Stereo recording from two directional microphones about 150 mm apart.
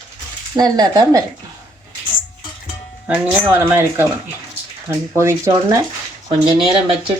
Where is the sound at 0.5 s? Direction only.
25° right (ahead or behind).